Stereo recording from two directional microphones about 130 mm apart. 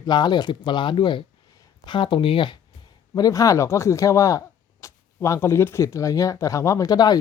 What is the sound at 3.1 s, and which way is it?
Speech, 25° left (ahead or behind).